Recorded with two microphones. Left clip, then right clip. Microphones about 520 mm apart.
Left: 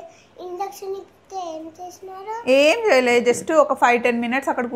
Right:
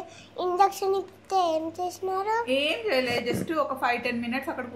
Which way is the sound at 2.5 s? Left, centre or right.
Left.